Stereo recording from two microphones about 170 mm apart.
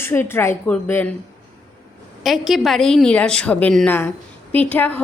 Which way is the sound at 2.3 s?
Centre (ahead or behind).